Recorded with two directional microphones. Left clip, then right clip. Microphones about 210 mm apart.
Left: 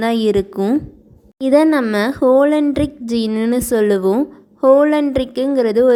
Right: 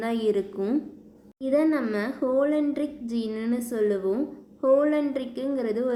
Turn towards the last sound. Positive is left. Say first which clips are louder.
# left 14 dB
turn(degrees=45)  # may be behind; listen again after turning